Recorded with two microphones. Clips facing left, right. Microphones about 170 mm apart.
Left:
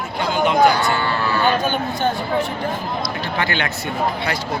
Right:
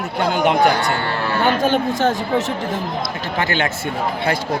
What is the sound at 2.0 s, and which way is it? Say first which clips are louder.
Speech: right 2 dB; 90° right.